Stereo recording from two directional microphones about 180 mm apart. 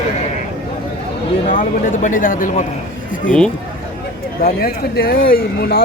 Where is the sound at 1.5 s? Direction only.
45° left (ahead or behind).